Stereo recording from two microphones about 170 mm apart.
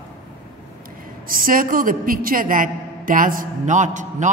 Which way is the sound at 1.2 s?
55° right (ahead or behind).